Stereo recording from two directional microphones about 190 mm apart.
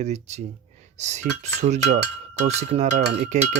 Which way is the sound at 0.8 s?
35° right (ahead or behind).